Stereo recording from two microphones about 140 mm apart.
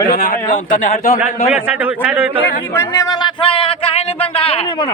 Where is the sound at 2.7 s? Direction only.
20° left (ahead or behind); by 4.9 s 45° left (ahead or behind).